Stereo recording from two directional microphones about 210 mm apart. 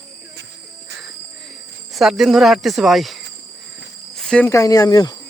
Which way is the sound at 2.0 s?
Centre (ahead or behind).